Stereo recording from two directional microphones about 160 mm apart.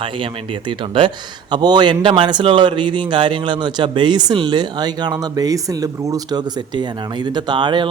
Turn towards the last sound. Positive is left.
turn(degrees=-30)  # may be behind; listen again after turning